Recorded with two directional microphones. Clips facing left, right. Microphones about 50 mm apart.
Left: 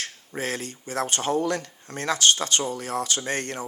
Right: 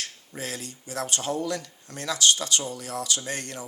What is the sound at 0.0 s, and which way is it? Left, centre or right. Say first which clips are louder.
Speech: left 5 dB; left.